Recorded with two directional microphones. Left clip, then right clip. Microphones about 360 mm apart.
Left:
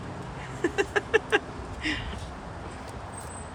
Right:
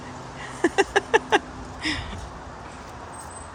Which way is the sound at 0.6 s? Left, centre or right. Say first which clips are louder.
Right 6 dB; centre.